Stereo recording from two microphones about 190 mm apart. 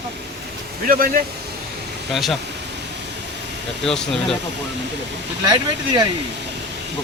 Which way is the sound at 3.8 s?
5° left (ahead or behind).